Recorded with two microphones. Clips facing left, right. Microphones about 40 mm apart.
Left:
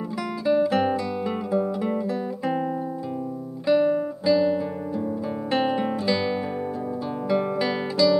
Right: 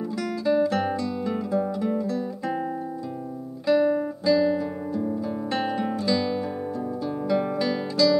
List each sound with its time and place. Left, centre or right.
0.5 s guitar: centre